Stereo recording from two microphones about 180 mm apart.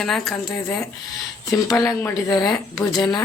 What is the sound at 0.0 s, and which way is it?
Speech, centre (ahead or behind).